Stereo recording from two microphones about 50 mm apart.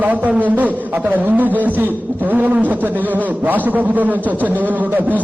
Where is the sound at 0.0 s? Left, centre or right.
Right.